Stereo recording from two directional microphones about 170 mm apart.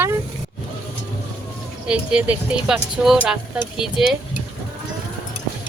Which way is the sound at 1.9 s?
5° right (ahead or behind).